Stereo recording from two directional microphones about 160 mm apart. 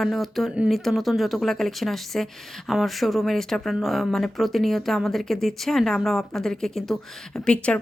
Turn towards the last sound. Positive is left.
turn(degrees=5)  # may be behind; listen again after turning